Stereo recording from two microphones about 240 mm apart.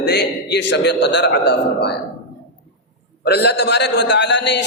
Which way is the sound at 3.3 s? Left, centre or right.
Left.